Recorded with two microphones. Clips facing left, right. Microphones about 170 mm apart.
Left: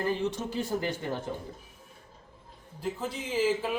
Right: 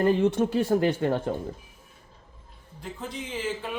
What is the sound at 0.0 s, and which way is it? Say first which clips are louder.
Speech: right 8 dB; 55° right (ahead or behind).